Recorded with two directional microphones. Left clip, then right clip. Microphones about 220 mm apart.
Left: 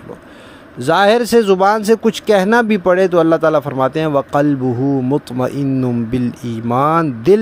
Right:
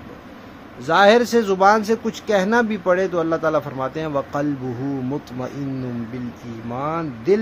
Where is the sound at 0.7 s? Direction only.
40° left (ahead or behind).